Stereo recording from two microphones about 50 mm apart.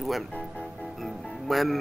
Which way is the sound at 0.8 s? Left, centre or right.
Centre.